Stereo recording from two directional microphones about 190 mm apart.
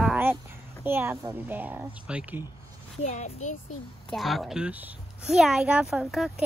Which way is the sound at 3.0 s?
40° left (ahead or behind).